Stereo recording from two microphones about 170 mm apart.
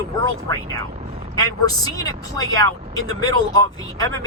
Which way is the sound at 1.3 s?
20° left (ahead or behind).